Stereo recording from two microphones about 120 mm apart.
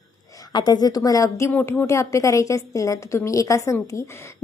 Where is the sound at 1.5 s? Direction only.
15° left (ahead or behind).